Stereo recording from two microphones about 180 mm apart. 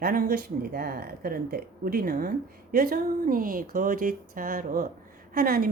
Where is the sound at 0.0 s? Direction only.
55° right (ahead or behind).